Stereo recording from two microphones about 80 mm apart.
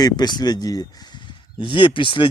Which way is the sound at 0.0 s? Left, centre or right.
Left.